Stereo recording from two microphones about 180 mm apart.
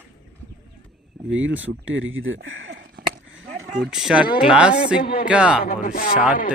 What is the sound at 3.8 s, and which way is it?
Speech, 5° right (ahead or behind).